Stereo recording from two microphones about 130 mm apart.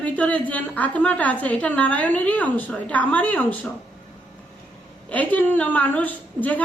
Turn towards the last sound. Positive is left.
turn(degrees=10)  # may be behind; listen again after turning